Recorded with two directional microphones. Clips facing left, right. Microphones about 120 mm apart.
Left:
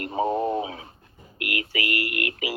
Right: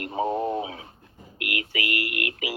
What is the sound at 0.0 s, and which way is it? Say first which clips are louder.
Radio: left 2 dB; 35° left (ahead or behind).